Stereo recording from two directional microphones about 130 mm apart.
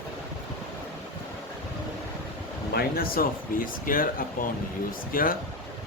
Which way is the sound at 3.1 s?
90° left.